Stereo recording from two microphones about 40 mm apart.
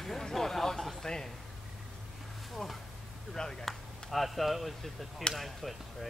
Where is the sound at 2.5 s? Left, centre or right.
Centre.